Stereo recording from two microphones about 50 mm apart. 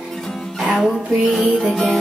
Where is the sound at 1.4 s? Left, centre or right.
Right.